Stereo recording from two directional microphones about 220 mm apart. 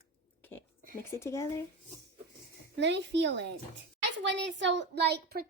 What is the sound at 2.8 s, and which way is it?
A woman's voice, 55° right (ahead or behind).